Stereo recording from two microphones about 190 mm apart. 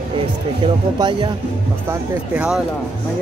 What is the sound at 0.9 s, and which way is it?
Speech, 20° right (ahead or behind).